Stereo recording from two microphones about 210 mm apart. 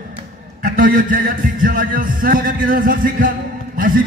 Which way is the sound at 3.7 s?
40° right (ahead or behind).